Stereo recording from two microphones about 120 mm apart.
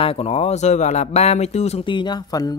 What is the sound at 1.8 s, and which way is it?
Speech, 40° left (ahead or behind).